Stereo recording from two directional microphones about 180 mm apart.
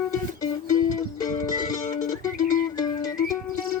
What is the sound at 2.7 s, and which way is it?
Music, 20° left (ahead or behind).